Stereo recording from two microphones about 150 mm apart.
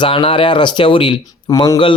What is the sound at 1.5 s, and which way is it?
Speech, 25° left (ahead or behind).